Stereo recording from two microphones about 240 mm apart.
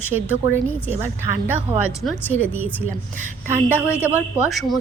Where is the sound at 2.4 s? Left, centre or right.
Centre.